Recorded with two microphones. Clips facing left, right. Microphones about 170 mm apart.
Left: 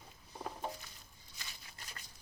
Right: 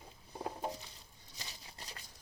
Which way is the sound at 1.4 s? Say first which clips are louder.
Right 3 dB; 35° right (ahead or behind).